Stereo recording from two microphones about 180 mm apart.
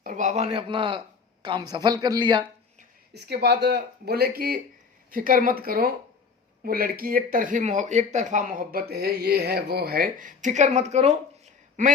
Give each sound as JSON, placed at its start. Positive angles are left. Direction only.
{"t": 0.0, "sound": "a man's voice", "side_deg": -45}
{"t": 3.1, "sound": "speech", "side_deg": -65}